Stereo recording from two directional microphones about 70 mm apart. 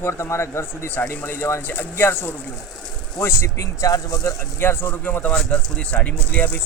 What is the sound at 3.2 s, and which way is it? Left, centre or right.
Speech, left.